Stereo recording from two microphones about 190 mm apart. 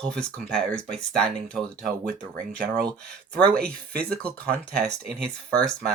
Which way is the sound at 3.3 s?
5° left (ahead or behind).